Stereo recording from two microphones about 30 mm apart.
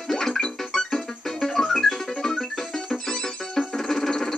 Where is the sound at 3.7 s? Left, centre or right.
Centre.